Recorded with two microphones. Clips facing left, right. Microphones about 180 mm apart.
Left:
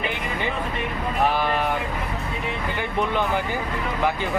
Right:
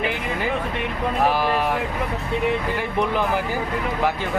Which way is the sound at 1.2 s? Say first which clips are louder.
Right 1 dB; 5° right (ahead or behind).